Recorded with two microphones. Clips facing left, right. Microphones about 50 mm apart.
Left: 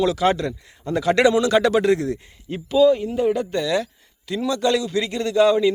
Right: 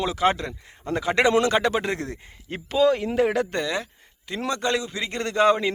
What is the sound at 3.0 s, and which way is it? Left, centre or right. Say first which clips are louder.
Speech: left 1 dB; right.